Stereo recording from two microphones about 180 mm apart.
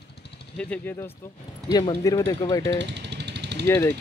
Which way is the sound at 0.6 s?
10° left (ahead or behind).